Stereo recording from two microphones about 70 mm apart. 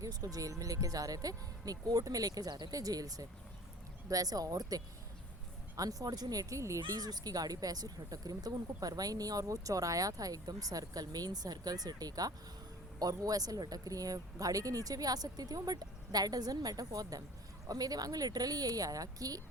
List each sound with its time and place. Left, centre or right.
0.0 s speech: right
6.8 s speech: right